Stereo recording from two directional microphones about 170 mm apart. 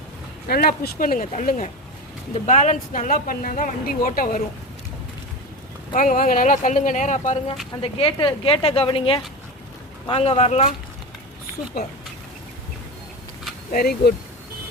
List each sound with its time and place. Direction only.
0.4 s speech: 60° left (ahead or behind)
5.9 s speech: 55° left (ahead or behind)
7.8 s speech: 35° left (ahead or behind)
13.7 s speech: 65° left (ahead or behind)